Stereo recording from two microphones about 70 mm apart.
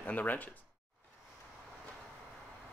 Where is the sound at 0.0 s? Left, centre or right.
Left.